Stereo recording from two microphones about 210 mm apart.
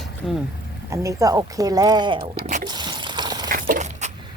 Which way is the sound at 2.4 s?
50° right (ahead or behind).